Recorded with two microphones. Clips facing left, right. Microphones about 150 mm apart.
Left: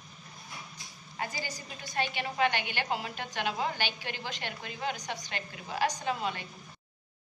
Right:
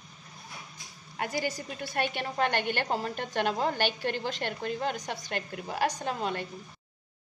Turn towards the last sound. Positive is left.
turn(degrees=-45)  # may be behind; listen again after turning